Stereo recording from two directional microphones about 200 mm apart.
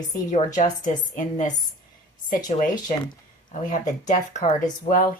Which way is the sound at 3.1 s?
40° left (ahead or behind).